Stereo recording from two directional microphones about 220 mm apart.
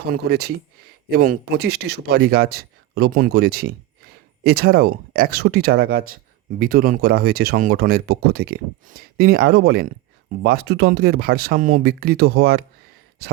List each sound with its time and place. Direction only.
0.1 s speech: 45° right (ahead or behind)